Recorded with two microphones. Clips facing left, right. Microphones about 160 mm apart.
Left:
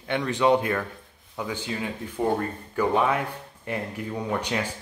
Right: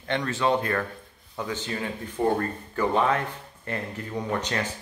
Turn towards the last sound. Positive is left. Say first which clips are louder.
# left 1 dB
turn(degrees=10)  # may be behind; listen again after turning